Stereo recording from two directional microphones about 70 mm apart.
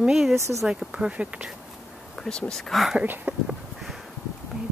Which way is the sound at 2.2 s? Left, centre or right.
Centre.